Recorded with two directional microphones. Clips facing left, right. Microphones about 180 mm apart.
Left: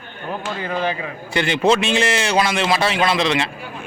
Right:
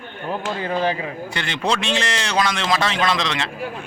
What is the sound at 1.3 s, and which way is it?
A man's voice, 10° left (ahead or behind).